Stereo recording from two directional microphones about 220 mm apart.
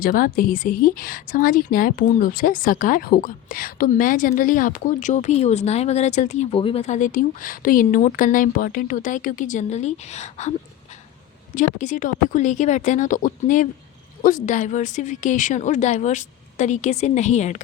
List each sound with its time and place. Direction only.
0.0 s a woman's voice: 40° left (ahead or behind)
11.5 s a woman's voice: 35° left (ahead or behind)